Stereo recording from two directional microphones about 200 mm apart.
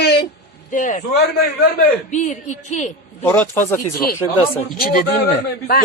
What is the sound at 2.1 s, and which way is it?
Speech, 35° left (ahead or behind).